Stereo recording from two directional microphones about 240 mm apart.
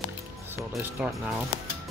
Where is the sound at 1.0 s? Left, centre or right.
Centre.